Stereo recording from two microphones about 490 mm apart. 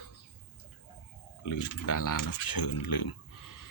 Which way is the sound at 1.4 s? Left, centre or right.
Left.